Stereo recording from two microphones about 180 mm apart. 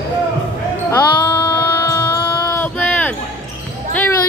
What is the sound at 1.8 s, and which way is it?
Music, 15° left (ahead or behind).